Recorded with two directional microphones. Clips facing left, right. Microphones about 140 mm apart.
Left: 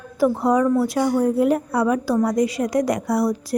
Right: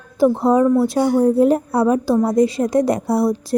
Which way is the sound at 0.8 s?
25° right (ahead or behind).